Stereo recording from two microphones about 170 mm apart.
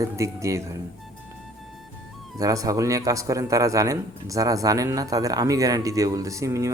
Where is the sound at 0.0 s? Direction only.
15° right (ahead or behind).